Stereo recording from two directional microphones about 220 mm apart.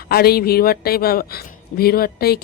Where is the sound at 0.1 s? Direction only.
45° left (ahead or behind).